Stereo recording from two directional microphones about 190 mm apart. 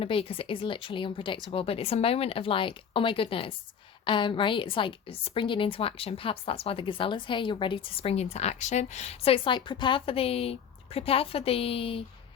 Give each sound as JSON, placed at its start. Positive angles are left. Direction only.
{"t": 0.0, "sound": "a woman's voice", "side_deg": 30}